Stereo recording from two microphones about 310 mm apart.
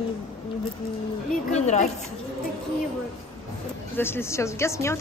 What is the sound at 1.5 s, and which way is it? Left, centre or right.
Speech, left.